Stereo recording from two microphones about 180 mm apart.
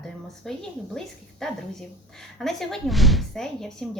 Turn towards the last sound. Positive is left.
turn(degrees=0)  # may be behind; listen again after turning